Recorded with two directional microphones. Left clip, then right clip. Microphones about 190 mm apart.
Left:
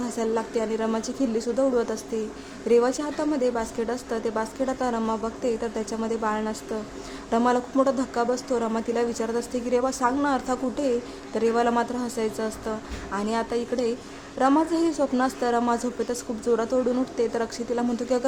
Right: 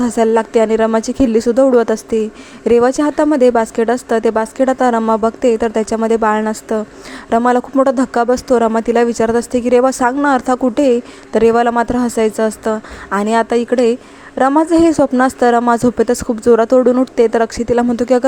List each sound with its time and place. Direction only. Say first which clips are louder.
0.0 s a woman's voice: right 14 dB; 40° right (ahead or behind)